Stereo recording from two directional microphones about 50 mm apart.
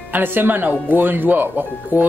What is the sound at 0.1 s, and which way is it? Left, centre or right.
Speech, right.